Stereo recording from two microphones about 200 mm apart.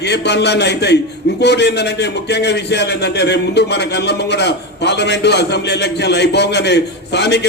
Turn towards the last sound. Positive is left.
turn(degrees=55)  # may be behind; listen again after turning